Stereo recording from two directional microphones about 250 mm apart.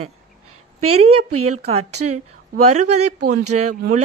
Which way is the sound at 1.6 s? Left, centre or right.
Right.